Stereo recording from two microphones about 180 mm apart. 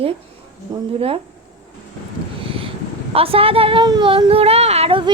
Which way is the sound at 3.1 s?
30° right (ahead or behind).